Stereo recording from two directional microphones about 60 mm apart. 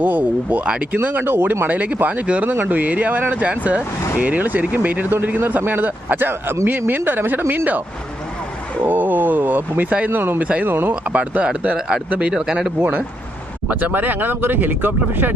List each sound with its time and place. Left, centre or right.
0.0 s speech: right
1.0 s speech: right
8.8 s speech: right
10.4 s speech: right
10.7 s speech: right
11.1 s speech: right
12.3 s speech: centre
13.7 s speech: right